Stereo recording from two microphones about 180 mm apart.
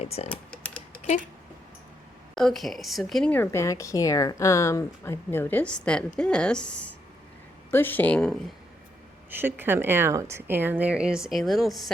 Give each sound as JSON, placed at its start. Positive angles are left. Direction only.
{"t": 0.0, "sound": "speech", "side_deg": 35}
{"t": 0.3, "sound": "typing", "side_deg": 5}
{"t": 2.3, "sound": "speech", "side_deg": 0}
{"t": 9.3, "sound": "a woman's voice", "side_deg": -10}